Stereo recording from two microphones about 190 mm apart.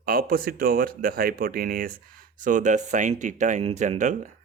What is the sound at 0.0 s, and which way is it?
Speech, 50° right (ahead or behind).